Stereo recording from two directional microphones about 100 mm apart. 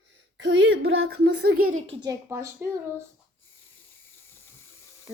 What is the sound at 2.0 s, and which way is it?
Speech, 30° right (ahead or behind).